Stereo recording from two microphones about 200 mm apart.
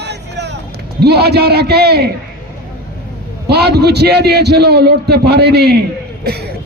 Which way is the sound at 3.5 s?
55° right (ahead or behind).